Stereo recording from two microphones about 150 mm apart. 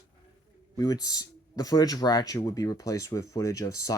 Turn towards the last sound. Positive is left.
turn(degrees=20)  # may be behind; listen again after turning